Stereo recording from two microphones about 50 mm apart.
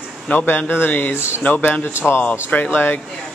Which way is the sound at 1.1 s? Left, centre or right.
Left.